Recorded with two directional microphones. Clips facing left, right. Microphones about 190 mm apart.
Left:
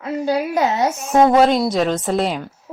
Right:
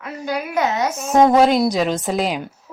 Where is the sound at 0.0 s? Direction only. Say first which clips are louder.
Left 6 dB; 30° left (ahead or behind).